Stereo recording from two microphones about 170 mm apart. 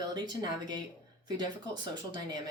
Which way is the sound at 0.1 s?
25° right (ahead or behind).